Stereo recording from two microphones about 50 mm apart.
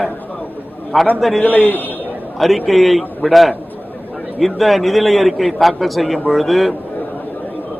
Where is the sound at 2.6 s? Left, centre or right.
Centre.